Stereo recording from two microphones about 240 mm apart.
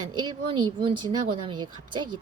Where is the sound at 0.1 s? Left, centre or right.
Centre.